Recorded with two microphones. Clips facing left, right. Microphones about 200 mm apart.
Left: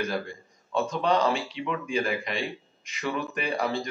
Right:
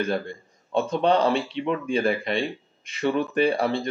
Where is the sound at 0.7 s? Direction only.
30° right (ahead or behind).